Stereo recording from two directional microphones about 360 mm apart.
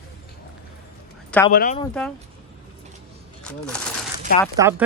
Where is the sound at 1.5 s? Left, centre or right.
Left.